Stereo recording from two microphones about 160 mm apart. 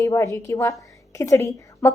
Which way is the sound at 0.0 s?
20° left (ahead or behind).